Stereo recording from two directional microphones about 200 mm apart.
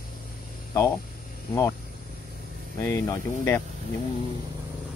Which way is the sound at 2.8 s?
10° left (ahead or behind).